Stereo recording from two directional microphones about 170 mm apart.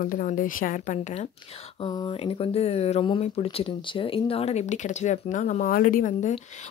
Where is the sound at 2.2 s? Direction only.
35° left (ahead or behind); by 6.3 s 50° left (ahead or behind).